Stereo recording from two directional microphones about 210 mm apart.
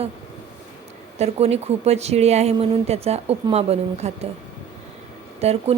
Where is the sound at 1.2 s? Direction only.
30° right (ahead or behind).